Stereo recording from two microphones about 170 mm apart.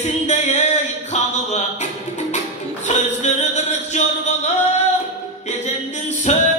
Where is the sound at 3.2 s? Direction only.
45° left (ahead or behind).